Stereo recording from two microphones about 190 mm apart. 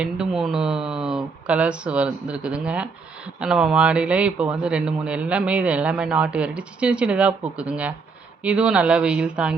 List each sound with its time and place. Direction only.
0.0 s a man's voice: 5° right (ahead or behind)